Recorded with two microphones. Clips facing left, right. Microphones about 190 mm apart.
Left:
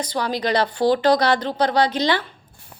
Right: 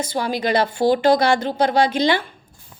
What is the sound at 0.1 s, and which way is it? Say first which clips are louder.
A woman's voice: right 1 dB; 10° right (ahead or behind).